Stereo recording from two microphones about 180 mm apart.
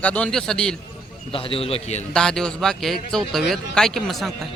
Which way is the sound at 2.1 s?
5° left (ahead or behind).